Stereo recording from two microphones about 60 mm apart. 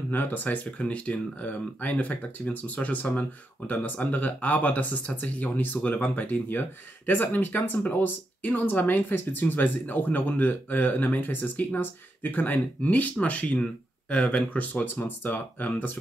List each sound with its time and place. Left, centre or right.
0.1 s speech: left